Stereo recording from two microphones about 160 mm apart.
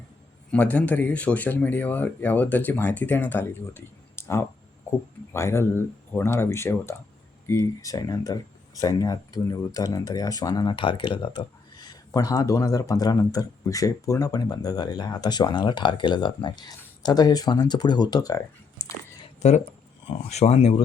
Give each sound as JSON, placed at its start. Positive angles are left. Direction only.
{"t": 0.5, "sound": "speech", "side_deg": 10}
{"t": 18.8, "sound": "a sound", "side_deg": 20}
{"t": 19.4, "sound": "speech", "side_deg": 45}